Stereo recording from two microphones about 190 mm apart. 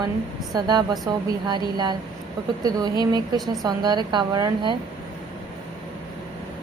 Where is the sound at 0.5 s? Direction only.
20° right (ahead or behind).